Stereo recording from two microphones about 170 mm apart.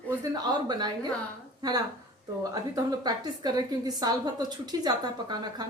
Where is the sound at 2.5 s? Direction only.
20° right (ahead or behind).